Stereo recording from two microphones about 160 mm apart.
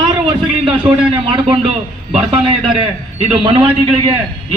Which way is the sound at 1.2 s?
35° right (ahead or behind).